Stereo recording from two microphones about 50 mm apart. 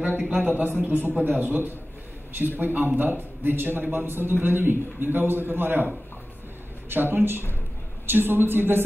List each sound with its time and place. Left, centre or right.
0.3 s a man's voice: right
6.9 s a man's voice: right